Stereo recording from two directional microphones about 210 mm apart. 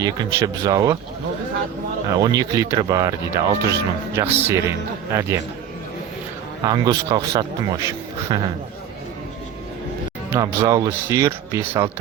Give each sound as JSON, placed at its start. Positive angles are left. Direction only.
{"t": 0.0, "sound": "speech", "side_deg": -15}
{"t": 2.0, "sound": "speech", "side_deg": -20}
{"t": 6.7, "sound": "speech", "side_deg": -20}
{"t": 10.2, "sound": "speech", "side_deg": -15}